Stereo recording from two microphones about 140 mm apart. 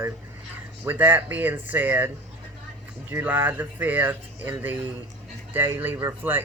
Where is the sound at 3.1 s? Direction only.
15° right (ahead or behind).